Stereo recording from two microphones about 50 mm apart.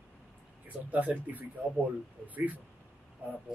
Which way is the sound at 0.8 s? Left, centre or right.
Right.